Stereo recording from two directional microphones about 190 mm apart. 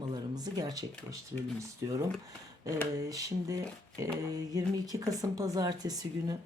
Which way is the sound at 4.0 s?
20° right (ahead or behind).